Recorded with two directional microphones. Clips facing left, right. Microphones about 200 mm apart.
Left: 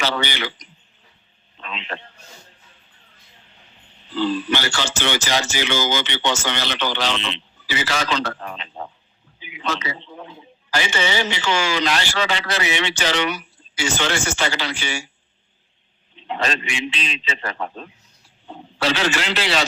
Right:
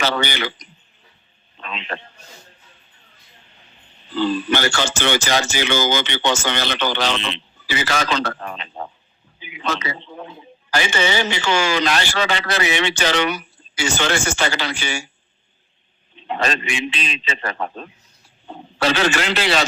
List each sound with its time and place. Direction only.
0.0 s speech: 50° right (ahead or behind)
1.6 s a sound: 50° right (ahead or behind)
4.1 s speech: 50° right (ahead or behind)
9.4 s a sound: 50° right (ahead or behind)
10.7 s speech: 50° right (ahead or behind)
16.1 s speech: 50° right (ahead or behind)